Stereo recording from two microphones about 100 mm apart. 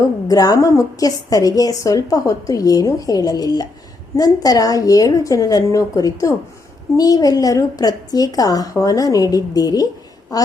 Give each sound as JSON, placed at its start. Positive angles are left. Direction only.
{"t": 0.3, "sound": "a woman's voice", "side_deg": 40}